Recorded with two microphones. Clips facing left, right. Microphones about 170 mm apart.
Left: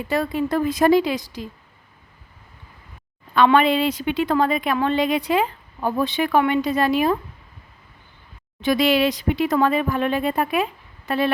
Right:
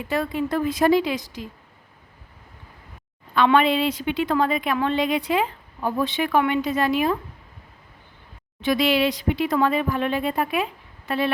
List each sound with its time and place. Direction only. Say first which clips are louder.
0.1 s a woman's voice: left 2 dB; 40° left (ahead or behind)
3.3 s a woman's voice: left 2 dB; 40° left (ahead or behind)
8.6 s a woman's voice: left 2 dB; 40° left (ahead or behind)